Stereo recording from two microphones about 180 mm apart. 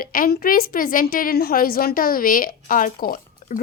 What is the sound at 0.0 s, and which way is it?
A woman's voice, 55° left (ahead or behind).